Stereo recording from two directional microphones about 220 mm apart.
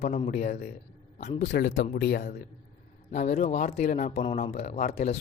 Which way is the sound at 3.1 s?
30° left (ahead or behind).